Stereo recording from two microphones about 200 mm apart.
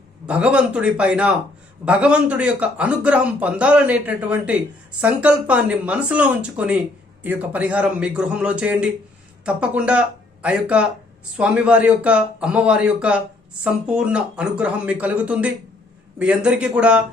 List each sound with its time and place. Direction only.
0.3 s a man's voice: 5° right (ahead or behind)